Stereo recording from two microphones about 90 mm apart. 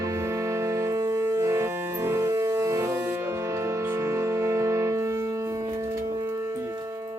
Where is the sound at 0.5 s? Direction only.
35° right (ahead or behind).